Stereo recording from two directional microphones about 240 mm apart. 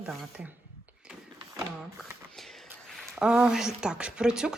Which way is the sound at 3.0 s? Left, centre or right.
Centre.